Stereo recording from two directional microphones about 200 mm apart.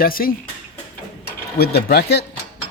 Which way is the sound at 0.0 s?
45° left (ahead or behind).